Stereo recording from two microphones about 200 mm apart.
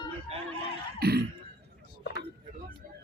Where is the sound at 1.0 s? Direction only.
55° right (ahead or behind).